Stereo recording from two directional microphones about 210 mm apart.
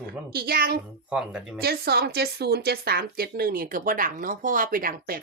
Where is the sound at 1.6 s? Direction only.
50° right (ahead or behind).